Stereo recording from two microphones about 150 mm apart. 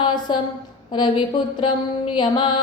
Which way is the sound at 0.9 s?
30° left (ahead or behind).